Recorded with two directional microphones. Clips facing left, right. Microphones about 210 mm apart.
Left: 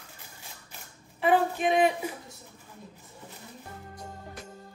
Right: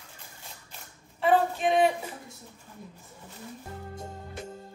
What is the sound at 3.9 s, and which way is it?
Music, 25° right (ahead or behind).